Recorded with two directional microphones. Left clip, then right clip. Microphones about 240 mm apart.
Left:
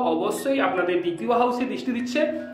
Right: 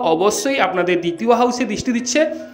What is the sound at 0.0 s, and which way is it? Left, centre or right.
A man's voice, right.